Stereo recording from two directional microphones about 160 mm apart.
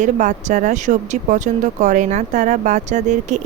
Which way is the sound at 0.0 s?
50° right (ahead or behind).